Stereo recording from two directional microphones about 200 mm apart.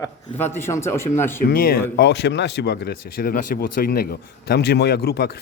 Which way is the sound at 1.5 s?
45° left (ahead or behind).